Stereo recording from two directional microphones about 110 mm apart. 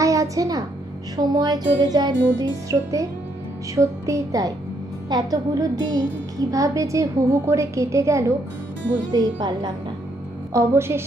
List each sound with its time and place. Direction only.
0.0 s music: 30° right (ahead or behind)
6.5 s a woman's voice: 30° right (ahead or behind)
9.1 s music: 40° right (ahead or behind)
10.5 s a woman's voice: 25° right (ahead or behind)